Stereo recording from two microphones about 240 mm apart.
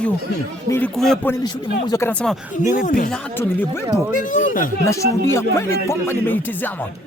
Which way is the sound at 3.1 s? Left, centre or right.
Centre.